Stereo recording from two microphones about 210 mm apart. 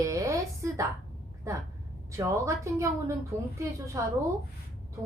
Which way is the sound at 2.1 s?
15° right (ahead or behind).